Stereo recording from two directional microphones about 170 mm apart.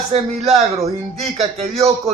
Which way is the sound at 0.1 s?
35° right (ahead or behind).